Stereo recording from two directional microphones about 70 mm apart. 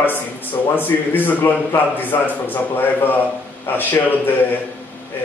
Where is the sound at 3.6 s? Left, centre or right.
Left.